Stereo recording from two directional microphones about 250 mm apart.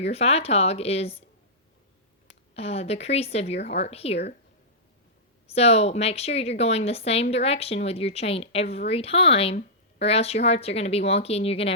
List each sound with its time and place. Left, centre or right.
0.0 s speech: left
2.6 s speech: left
5.5 s speech: left